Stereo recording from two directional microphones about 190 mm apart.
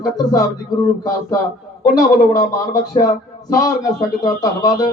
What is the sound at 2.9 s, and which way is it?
Speech, 20° left (ahead or behind).